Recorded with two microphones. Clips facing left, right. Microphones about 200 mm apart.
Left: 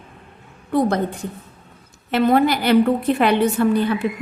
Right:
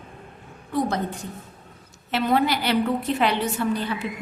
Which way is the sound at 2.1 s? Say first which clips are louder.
Left 5 dB; 50° left (ahead or behind).